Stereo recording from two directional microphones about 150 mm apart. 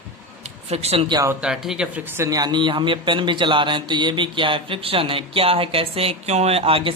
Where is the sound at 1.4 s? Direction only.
5° right (ahead or behind).